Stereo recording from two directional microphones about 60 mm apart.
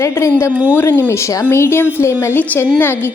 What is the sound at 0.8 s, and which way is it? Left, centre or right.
Speech, left.